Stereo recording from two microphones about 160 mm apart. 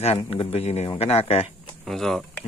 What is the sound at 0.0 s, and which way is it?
Speech, 40° left (ahead or behind).